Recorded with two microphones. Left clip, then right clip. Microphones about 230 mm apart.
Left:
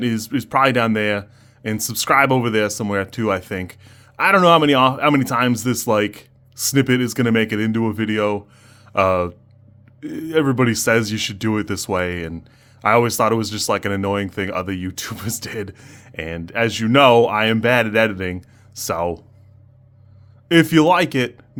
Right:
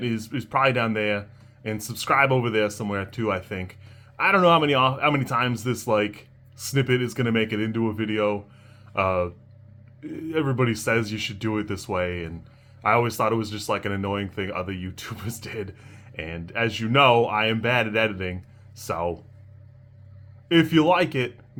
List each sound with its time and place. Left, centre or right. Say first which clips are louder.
0.0 s speech: left 7 dB; left
20.5 s speech: left 5 dB; left